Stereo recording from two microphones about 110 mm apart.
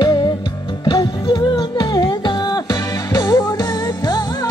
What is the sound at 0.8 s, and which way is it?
Music, 45° left (ahead or behind).